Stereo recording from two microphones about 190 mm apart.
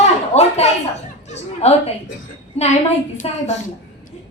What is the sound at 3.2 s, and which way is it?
Speech, 30° left (ahead or behind).